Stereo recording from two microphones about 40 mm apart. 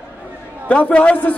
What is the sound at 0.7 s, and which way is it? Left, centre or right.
Speech, left.